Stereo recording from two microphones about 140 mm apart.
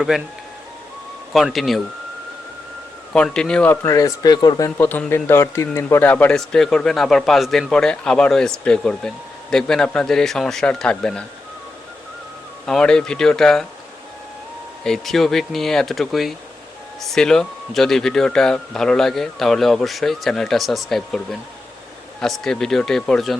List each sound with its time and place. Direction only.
0.1 s a man's voice: 5° right (ahead or behind)
1.3 s a man's voice: centre (ahead or behind)
3.1 s speech: 5° left (ahead or behind)
3.8 s speech: 25° left (ahead or behind)
4.8 s a man's voice: 15° left (ahead or behind)
12.6 s a man's voice: 5° left (ahead or behind)
14.8 s a man's voice: 5° left (ahead or behind)